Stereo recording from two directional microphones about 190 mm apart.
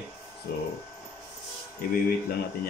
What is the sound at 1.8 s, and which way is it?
Speech, 50° left (ahead or behind).